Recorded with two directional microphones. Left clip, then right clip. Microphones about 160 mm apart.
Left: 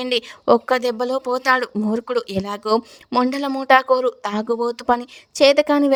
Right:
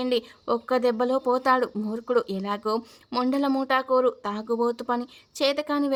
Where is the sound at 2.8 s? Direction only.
25° left (ahead or behind).